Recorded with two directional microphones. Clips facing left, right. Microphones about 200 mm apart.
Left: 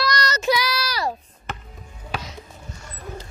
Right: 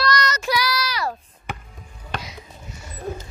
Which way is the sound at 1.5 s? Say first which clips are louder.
Right 1 dB; 10° right (ahead or behind).